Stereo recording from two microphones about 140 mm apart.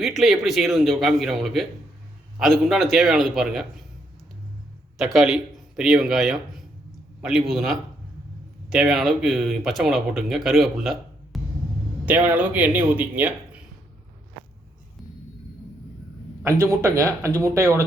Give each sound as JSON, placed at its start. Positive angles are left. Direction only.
{"t": 0.0, "sound": "speech", "side_deg": 0}
{"t": 4.9, "sound": "a man's voice", "side_deg": -5}
{"t": 12.0, "sound": "speech", "side_deg": -10}
{"t": 16.4, "sound": "speech", "side_deg": -20}